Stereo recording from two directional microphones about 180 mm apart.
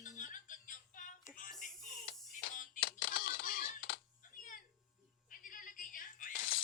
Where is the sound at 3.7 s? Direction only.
90° left.